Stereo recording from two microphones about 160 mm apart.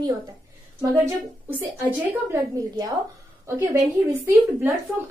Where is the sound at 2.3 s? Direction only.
20° right (ahead or behind).